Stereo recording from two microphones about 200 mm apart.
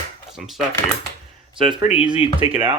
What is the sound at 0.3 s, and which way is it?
Speech, centre (ahead or behind).